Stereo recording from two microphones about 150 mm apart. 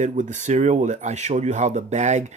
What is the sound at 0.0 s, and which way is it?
Speech, 55° right (ahead or behind).